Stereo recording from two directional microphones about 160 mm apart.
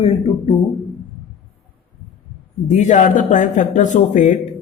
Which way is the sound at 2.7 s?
50° left (ahead or behind).